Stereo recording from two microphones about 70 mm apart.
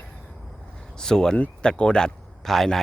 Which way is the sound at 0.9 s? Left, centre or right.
Centre.